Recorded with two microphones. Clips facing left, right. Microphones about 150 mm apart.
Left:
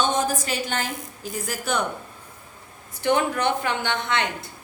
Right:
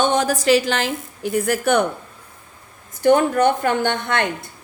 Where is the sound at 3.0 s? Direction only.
45° right (ahead or behind).